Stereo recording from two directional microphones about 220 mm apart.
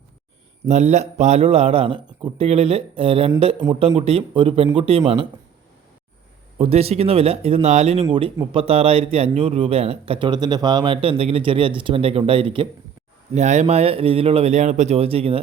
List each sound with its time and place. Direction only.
0.6 s speech: 30° right (ahead or behind)
6.6 s speech: 25° right (ahead or behind)
8.0 s speech: 20° right (ahead or behind)